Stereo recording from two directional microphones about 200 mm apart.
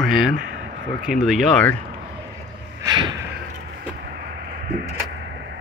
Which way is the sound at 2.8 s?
20° right (ahead or behind).